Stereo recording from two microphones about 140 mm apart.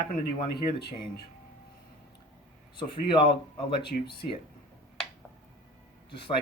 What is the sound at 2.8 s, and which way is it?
Speech, 35° left (ahead or behind).